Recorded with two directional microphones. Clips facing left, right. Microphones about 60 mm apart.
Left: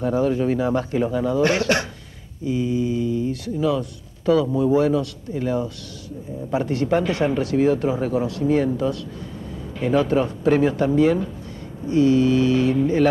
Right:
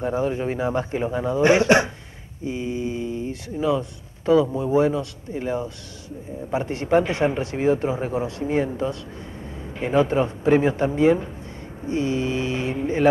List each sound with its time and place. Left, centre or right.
0.0 s speech: right